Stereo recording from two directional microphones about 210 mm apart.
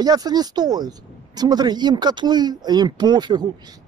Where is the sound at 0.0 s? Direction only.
20° right (ahead or behind).